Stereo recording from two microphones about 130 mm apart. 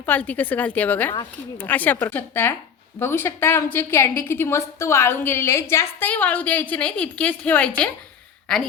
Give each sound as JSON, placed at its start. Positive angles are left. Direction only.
{"t": 0.0, "sound": "a woman's voice", "side_deg": 10}